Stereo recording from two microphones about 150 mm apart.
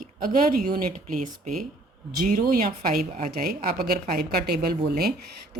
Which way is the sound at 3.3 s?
80° right.